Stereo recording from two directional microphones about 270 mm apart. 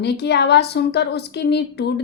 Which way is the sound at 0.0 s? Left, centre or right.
Left.